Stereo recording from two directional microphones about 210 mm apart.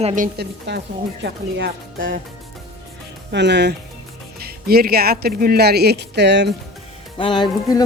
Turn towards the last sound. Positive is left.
turn(degrees=20)  # may be behind; listen again after turning